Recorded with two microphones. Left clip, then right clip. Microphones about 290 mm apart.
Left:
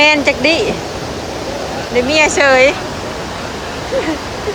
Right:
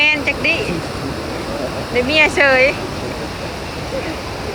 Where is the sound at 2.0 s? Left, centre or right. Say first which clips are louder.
Left 2 dB; centre.